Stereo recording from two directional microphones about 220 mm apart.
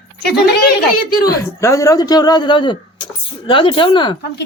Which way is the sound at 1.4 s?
15° left (ahead or behind).